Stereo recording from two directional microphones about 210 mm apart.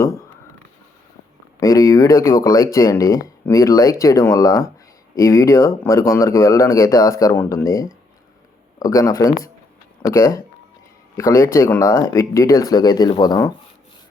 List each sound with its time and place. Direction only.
1.5 s speech: 15° left (ahead or behind)